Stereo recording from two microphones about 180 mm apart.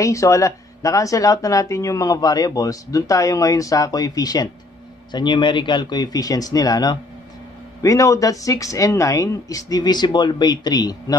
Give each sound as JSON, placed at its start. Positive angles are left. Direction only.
{"t": 0.0, "sound": "speech", "side_deg": 15}